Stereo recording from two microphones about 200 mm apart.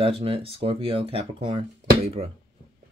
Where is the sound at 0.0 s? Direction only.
30° right (ahead or behind).